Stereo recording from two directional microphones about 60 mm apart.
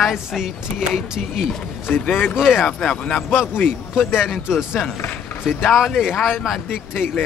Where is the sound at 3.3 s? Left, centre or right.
Left.